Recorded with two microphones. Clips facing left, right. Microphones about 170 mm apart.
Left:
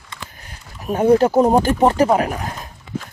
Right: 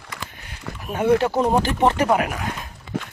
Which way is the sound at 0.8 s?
40° left (ahead or behind).